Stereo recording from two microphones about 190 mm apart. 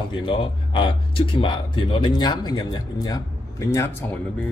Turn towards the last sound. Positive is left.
turn(degrees=10)  # may be behind; listen again after turning